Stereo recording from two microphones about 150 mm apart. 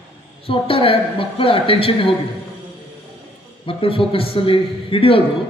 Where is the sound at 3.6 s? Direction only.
35° left (ahead or behind).